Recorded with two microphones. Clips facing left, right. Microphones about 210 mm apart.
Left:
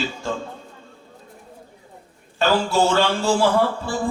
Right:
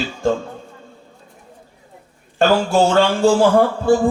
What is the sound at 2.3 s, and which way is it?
A man's voice, 50° right (ahead or behind).